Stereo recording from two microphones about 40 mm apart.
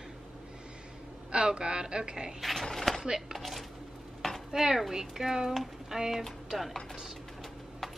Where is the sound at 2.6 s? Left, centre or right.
Centre.